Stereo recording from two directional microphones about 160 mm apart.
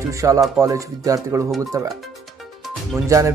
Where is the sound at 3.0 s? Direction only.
20° right (ahead or behind).